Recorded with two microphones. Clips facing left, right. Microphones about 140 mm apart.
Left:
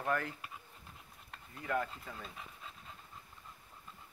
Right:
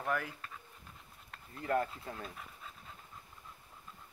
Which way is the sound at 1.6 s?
40° right (ahead or behind).